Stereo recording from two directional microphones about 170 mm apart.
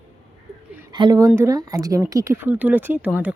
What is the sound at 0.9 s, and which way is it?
Speech, 25° right (ahead or behind).